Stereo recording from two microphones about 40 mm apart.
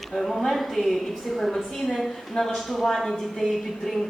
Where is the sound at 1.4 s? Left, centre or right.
Centre.